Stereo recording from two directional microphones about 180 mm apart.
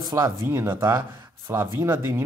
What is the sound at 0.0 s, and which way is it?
Speech, 20° right (ahead or behind).